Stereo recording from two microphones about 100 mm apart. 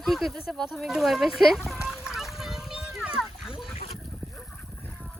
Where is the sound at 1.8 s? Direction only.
5° right (ahead or behind).